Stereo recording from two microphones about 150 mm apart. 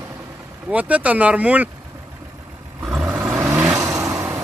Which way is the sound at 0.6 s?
10° right (ahead or behind).